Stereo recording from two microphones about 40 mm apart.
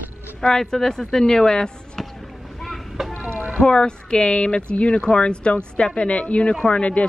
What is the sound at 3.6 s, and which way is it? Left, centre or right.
Speech, left.